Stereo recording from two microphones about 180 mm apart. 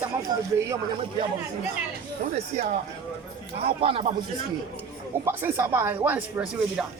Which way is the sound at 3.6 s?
30° right (ahead or behind).